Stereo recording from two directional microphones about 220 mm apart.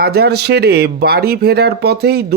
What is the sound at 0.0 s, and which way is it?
Speech, 45° right (ahead or behind).